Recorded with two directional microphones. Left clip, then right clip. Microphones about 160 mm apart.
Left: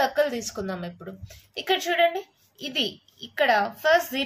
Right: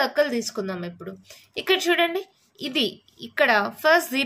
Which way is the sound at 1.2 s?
45° right (ahead or behind).